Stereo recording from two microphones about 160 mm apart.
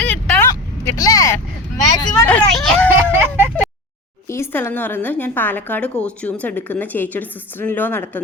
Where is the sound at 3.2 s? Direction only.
10° right (ahead or behind).